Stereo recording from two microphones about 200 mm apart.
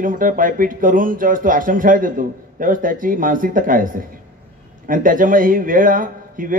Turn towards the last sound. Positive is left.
turn(degrees=-45)  # may be behind; listen again after turning